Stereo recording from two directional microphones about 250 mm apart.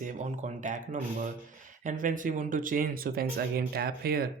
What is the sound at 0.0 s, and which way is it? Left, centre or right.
Speech, right.